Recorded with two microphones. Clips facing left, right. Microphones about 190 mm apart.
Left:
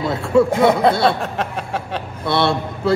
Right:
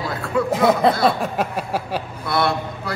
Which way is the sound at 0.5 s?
Centre (ahead or behind).